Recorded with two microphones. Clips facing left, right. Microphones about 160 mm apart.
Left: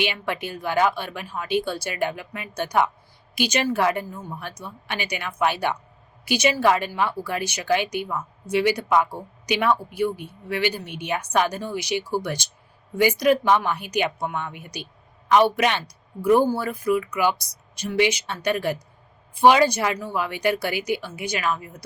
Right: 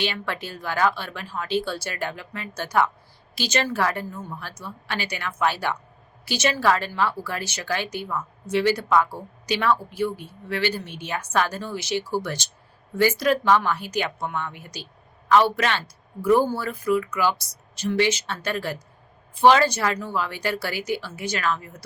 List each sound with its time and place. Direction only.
0.0 s speech: 15° left (ahead or behind)